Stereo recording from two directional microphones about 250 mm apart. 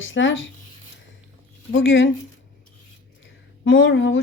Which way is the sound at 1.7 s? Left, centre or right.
Left.